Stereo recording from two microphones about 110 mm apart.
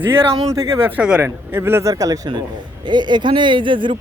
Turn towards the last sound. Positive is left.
turn(degrees=-50)  # may be behind; listen again after turning